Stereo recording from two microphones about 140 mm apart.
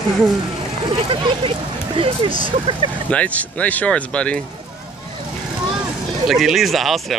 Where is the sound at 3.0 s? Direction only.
10° left (ahead or behind).